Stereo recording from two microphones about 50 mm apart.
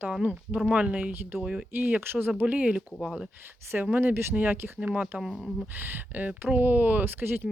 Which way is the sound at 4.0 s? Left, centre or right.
Right.